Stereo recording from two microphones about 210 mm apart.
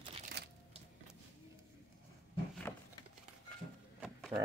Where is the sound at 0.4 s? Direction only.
50° right (ahead or behind).